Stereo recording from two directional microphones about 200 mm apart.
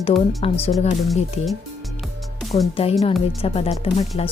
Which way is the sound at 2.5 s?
25° left (ahead or behind).